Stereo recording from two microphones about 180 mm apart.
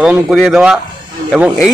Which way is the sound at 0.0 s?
5° right (ahead or behind).